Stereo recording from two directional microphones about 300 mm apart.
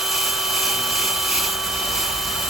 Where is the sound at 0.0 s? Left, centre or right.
Centre.